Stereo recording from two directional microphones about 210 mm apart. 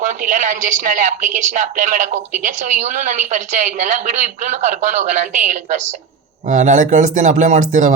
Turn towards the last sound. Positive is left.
turn(degrees=-35)  # may be behind; listen again after turning